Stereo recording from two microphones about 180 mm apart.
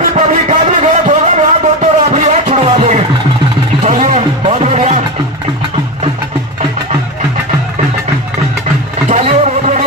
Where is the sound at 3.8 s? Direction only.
45° right (ahead or behind).